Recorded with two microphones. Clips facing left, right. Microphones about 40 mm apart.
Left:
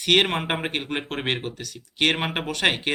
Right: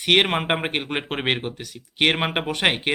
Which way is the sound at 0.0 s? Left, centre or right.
Centre.